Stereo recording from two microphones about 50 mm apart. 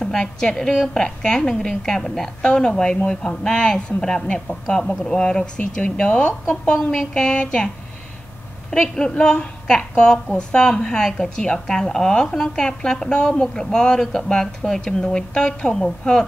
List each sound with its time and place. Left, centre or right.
0.0 s a woman's voice: centre